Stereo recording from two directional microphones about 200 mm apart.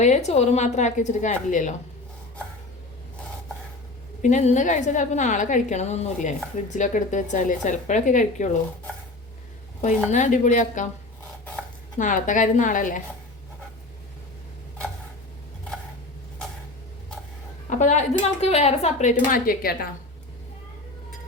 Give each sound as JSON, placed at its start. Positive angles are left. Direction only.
{"t": 0.0, "sound": "a woman's voice", "side_deg": 35}
{"t": 4.2, "sound": "a woman's voice", "side_deg": 35}
{"t": 9.8, "sound": "a woman's voice", "side_deg": 35}
{"t": 11.9, "sound": "a woman's voice", "side_deg": 40}
{"t": 17.7, "sound": "a woman's voice", "side_deg": 35}